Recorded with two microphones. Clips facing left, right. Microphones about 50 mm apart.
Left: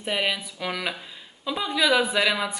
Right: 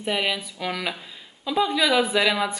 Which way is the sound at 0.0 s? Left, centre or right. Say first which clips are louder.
Right 1 dB; centre.